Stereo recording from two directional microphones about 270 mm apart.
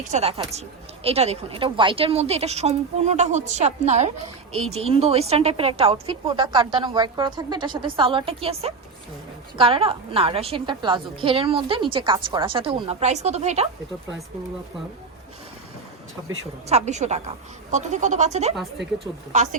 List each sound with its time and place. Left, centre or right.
0.1 s a woman's voice: right
16.6 s a woman's voice: right